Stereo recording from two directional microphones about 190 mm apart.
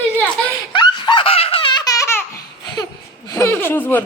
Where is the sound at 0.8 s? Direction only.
25° left (ahead or behind).